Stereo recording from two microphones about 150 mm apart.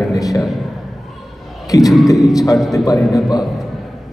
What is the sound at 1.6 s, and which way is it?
Speech, 25° left (ahead or behind).